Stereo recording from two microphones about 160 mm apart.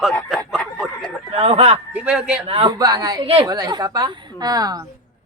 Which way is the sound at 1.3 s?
40° right (ahead or behind).